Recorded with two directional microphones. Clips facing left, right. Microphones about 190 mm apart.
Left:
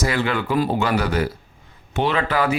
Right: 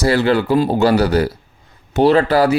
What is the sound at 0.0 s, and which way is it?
Speech, 35° right (ahead or behind).